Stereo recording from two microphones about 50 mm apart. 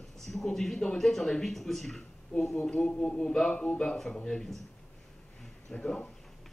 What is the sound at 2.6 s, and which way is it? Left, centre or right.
A woman's voice, centre.